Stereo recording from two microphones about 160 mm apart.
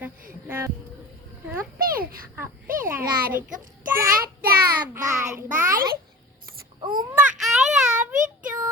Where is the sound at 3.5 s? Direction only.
60° right (ahead or behind).